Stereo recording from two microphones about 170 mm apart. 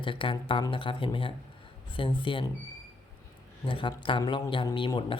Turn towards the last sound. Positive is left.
turn(degrees=30)  # may be behind; listen again after turning